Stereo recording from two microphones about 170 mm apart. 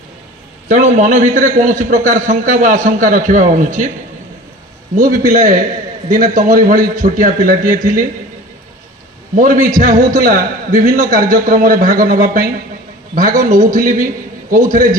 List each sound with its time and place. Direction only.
0.7 s a man's voice: 50° right (ahead or behind)
4.9 s a man's voice: 50° right (ahead or behind)
9.3 s a man's voice: 50° right (ahead or behind)